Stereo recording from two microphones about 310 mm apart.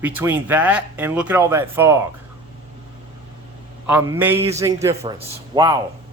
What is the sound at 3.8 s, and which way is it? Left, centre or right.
A man's voice, centre.